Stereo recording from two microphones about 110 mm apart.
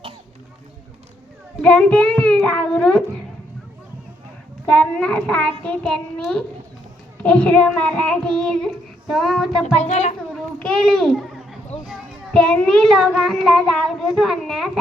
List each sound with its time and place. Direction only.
1.6 s child singing: 10° left (ahead or behind)
4.6 s child singing: 10° left (ahead or behind)
9.7 s speech: 80° left
10.3 s a sound: 5° left (ahead or behind)
11.9 s child singing: 5° left (ahead or behind)